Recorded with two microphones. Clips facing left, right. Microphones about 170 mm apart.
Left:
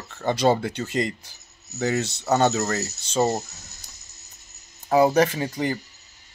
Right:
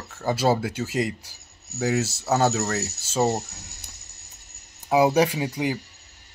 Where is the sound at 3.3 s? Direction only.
70° right (ahead or behind).